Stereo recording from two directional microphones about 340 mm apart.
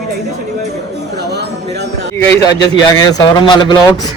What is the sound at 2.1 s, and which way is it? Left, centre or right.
A man's voice, centre.